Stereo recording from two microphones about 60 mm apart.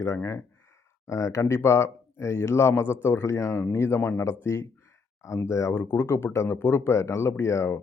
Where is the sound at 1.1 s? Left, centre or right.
Left.